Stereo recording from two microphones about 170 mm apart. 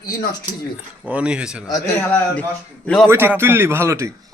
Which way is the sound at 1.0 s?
5° right (ahead or behind).